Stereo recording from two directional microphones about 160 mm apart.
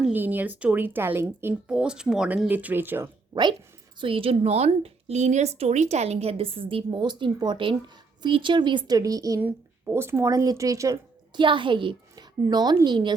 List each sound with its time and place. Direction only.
0.0 s speech: 10° right (ahead or behind)
4.0 s a woman's voice: 35° right (ahead or behind)
9.4 s a woman's voice: 10° right (ahead or behind); by 13.1 s 30° right (ahead or behind)